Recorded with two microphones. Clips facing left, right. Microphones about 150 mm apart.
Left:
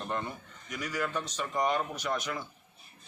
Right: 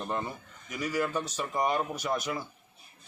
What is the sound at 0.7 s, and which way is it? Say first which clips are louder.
A man's voice: right 3 dB; 5° right (ahead or behind).